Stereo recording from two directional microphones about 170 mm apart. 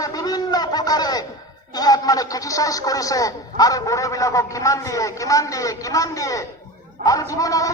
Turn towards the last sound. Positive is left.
turn(degrees=20)  # may be behind; listen again after turning